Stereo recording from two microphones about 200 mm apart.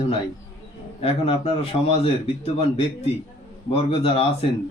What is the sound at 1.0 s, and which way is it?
Speech, 30° left (ahead or behind).